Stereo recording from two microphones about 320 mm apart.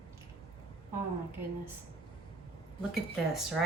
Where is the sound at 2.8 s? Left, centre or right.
Centre.